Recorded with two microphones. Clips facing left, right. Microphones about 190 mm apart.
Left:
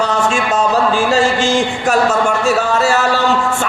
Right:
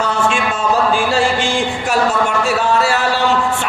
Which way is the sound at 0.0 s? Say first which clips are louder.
Left 1 dB; 40° left (ahead or behind).